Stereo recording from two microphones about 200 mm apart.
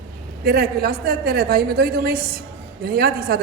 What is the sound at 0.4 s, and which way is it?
A woman's voice, 50° right (ahead or behind).